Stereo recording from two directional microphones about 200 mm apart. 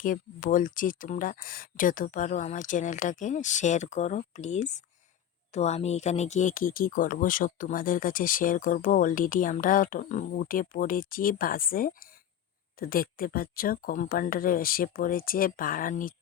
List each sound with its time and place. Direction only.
0.0 s speech: 40° left (ahead or behind)